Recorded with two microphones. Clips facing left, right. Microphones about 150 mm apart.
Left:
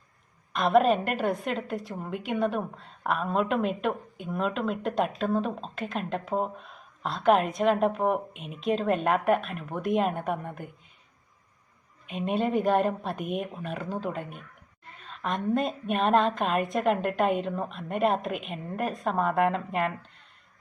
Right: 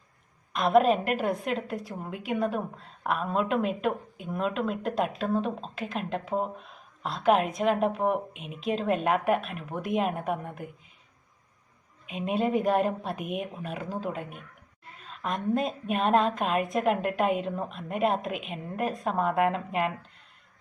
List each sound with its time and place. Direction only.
0.5 s a woman's voice: centre (ahead or behind)
12.0 s a woman's voice: centre (ahead or behind)